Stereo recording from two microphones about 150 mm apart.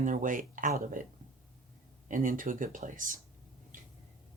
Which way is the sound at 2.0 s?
60° right (ahead or behind).